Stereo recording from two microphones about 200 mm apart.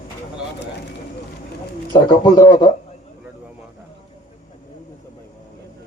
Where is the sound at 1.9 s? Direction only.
20° left (ahead or behind).